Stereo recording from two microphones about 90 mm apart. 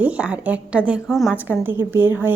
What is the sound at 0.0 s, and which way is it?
A woman's voice, 15° right (ahead or behind).